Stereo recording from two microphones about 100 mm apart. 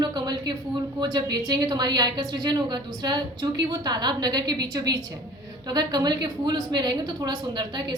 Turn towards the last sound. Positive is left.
turn(degrees=-50)  # may be behind; listen again after turning